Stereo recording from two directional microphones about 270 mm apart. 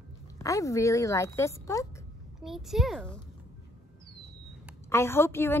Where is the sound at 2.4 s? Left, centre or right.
Centre.